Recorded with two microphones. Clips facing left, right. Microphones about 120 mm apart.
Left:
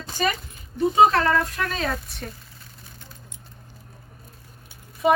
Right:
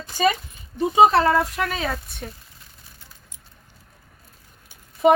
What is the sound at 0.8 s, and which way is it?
Speech, 15° right (ahead or behind).